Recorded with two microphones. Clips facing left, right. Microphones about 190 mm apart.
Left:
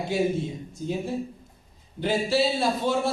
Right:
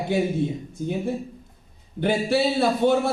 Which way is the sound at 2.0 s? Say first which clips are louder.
Right 2 dB; 60° right (ahead or behind).